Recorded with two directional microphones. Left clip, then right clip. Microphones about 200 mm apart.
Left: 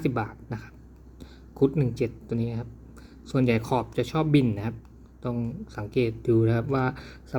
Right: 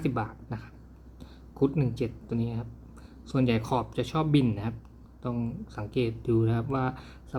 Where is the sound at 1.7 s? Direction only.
10° right (ahead or behind).